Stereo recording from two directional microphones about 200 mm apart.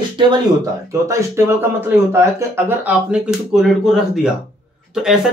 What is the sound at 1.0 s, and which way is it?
Speech, 15° right (ahead or behind).